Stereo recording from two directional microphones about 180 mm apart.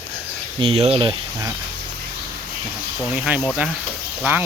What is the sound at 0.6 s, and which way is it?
Speech, 30° right (ahead or behind).